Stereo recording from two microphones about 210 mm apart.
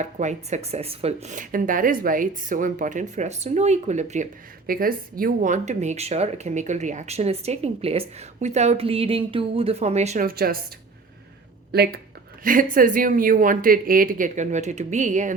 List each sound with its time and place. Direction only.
0.0 s speech: 35° right (ahead or behind)
10.2 s a woman's voice: 45° right (ahead or behind)
11.7 s speech: 50° right (ahead or behind)